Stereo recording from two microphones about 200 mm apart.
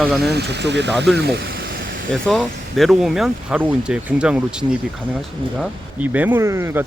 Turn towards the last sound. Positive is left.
turn(degrees=-10)  # may be behind; listen again after turning